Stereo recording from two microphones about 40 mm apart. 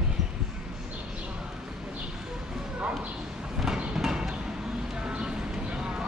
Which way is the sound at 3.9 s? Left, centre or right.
Centre.